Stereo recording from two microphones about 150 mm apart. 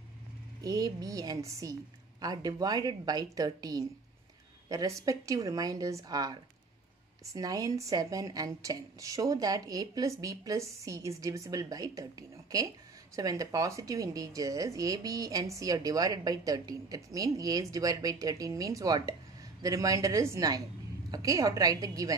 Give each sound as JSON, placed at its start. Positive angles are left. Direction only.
{"t": 0.6, "sound": "speech", "side_deg": -25}
{"t": 7.3, "sound": "speech", "side_deg": -25}